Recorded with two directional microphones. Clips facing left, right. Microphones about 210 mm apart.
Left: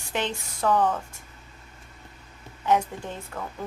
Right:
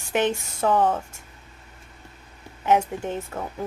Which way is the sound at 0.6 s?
25° right (ahead or behind).